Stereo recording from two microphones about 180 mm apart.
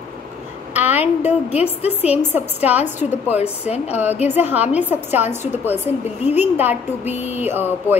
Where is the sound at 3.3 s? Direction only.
35° left (ahead or behind).